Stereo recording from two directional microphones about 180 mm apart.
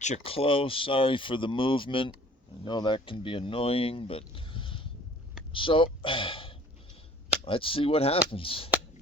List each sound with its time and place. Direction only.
0.0 s speech: 35° left (ahead or behind)